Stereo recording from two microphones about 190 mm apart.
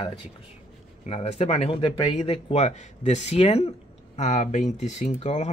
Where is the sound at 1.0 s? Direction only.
35° left (ahead or behind).